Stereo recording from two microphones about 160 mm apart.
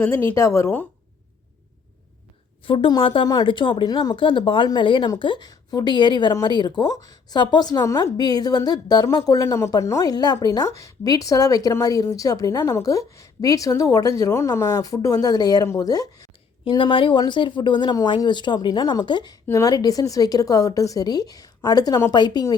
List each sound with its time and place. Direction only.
0.0 s speech: 10° left (ahead or behind)
2.6 s speech: 30° left (ahead or behind)